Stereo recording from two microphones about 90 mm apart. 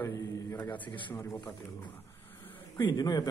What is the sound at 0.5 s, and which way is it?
Speech, 20° left (ahead or behind).